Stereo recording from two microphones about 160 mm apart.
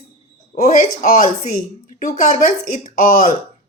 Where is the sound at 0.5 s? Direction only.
55° left (ahead or behind).